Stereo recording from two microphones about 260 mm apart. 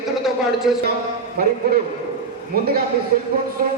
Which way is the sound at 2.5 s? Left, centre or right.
Right.